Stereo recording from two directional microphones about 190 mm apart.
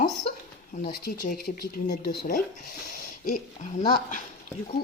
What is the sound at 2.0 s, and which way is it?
Speech, 45° left (ahead or behind).